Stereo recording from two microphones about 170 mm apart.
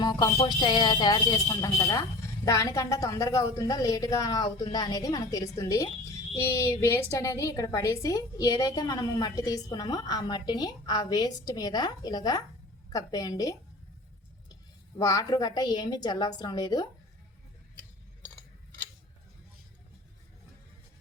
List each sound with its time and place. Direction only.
0.0 s speech: 25° left (ahead or behind)
14.9 s speech: 20° left (ahead or behind)